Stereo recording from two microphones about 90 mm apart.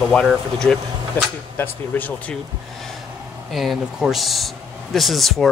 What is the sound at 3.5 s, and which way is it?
Speech, centre (ahead or behind).